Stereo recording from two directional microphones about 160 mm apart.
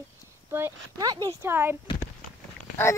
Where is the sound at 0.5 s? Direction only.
15° right (ahead or behind).